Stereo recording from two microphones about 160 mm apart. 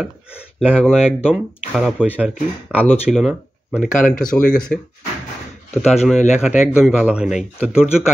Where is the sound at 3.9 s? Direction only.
55° left (ahead or behind).